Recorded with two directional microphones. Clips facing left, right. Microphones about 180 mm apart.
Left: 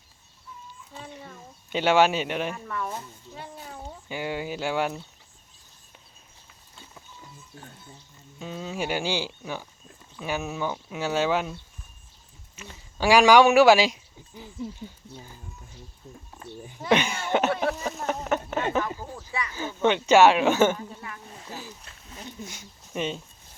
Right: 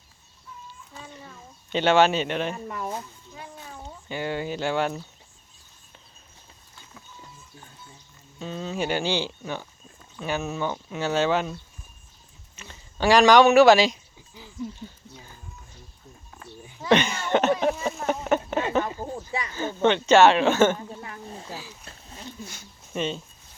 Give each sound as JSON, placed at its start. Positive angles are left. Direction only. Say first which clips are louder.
{"t": 1.7, "sound": "speech", "louder": "right 1 dB", "side_deg": 10}
{"t": 2.6, "sound": "speech", "louder": "right 1 dB", "side_deg": -25}
{"t": 3.3, "sound": "a child's voice", "louder": "left 1 dB", "side_deg": 30}
{"t": 4.1, "sound": "speech", "louder": "right 2 dB", "side_deg": 10}
{"t": 8.4, "sound": "speech", "louder": "right 2 dB", "side_deg": 10}
{"t": 12.5, "sound": "speech", "louder": "right 1 dB", "side_deg": 10}
{"t": 16.9, "sound": "speech", "louder": "right 2 dB", "side_deg": 10}
{"t": 17.7, "sound": "a sound", "louder": "right 3 dB", "side_deg": 0}
{"t": 19.5, "sound": "speech", "louder": "right 2 dB", "side_deg": 10}
{"t": 21.0, "sound": "dishes", "louder": "right 3 dB", "side_deg": -30}
{"t": 21.8, "sound": "wild animals", "louder": "right 2 dB", "side_deg": -30}
{"t": 22.3, "sound": "a sound", "louder": "even", "side_deg": 15}
{"t": 23.0, "sound": "speech", "louder": "right 1 dB", "side_deg": 15}